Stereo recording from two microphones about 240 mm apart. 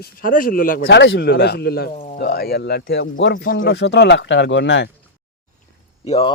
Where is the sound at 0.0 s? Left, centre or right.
Left.